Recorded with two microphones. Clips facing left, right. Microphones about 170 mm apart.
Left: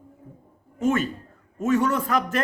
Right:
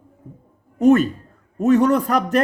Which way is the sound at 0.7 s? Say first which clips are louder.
Right 9 dB; 40° right (ahead or behind).